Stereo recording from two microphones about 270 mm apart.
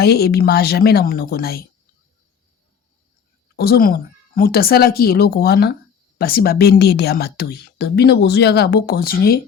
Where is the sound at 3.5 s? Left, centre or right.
Left.